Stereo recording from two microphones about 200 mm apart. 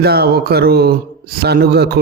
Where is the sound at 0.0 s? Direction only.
50° right (ahead or behind).